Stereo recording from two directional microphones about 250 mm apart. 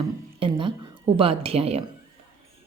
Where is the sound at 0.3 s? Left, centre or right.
Centre.